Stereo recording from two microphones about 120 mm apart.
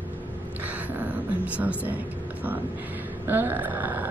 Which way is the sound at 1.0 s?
10° right (ahead or behind).